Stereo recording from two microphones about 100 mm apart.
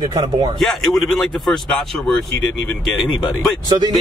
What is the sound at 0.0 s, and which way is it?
Speech, 45° right (ahead or behind).